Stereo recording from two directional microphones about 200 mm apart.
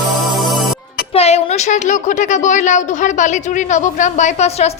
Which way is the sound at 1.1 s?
30° left (ahead or behind).